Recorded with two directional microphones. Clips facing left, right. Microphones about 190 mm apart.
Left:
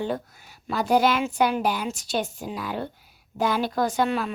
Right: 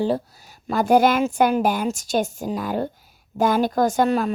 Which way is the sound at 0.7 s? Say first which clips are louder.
Right 4 dB; 50° right (ahead or behind).